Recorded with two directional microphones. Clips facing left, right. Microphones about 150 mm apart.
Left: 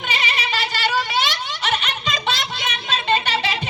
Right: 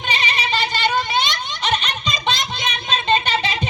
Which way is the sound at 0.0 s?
20° right (ahead or behind).